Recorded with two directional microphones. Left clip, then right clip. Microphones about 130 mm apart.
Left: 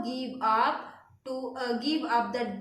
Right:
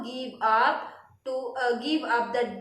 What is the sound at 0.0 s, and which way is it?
A woman's voice, 40° left (ahead or behind).